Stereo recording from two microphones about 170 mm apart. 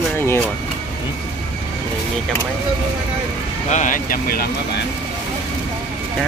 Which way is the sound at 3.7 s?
50° left (ahead or behind).